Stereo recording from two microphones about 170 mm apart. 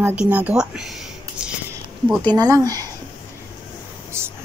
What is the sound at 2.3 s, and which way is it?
Speech, 20° right (ahead or behind).